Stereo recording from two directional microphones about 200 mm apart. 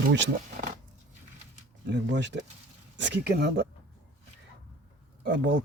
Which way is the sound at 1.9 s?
60° right (ahead or behind).